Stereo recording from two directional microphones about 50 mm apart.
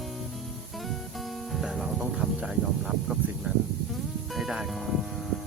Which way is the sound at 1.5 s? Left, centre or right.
Centre.